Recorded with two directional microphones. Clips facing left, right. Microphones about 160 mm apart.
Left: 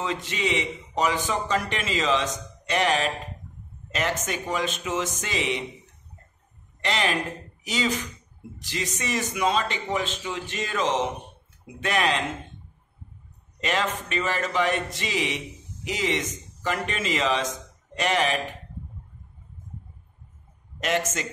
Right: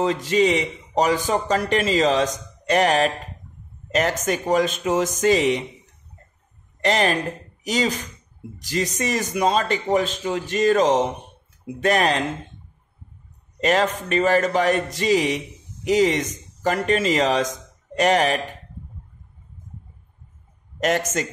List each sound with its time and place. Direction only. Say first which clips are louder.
0.0 s a man's voice: right 9 dB; 40° right (ahead or behind)
6.8 s speech: right 6 dB; 45° right (ahead or behind)
13.6 s a man's voice: right 7 dB; 45° right (ahead or behind)
20.8 s a man's voice: right 5 dB; 45° right (ahead or behind)